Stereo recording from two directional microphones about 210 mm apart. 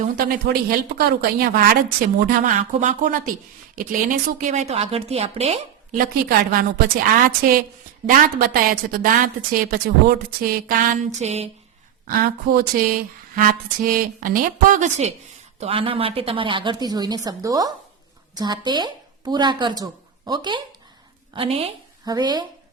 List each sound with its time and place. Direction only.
0.0 s a woman's voice: 45° right (ahead or behind); by 5.5 s 30° right (ahead or behind)
6.0 s a woman's voice: 45° right (ahead or behind)
8.1 s a woman's voice: 40° right (ahead or behind)
12.0 s a woman's voice: 45° right (ahead or behind); by 22.4 s 20° right (ahead or behind)